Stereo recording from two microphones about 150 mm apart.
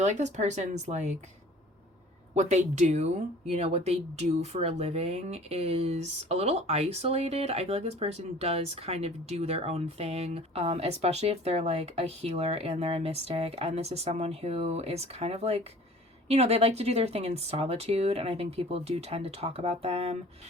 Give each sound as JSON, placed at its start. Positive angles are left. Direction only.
{"t": 0.0, "sound": "speech", "side_deg": -50}
{"t": 2.3, "sound": "speech", "side_deg": -50}